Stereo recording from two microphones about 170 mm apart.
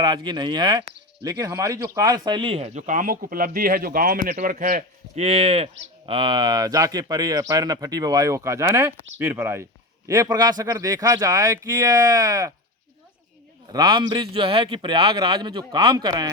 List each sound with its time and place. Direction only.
0.0 s a man's voice: 25° right (ahead or behind); by 4.9 s 60° right (ahead or behind)
5.1 s speech: 35° right (ahead or behind)
13.7 s speech: 25° right (ahead or behind)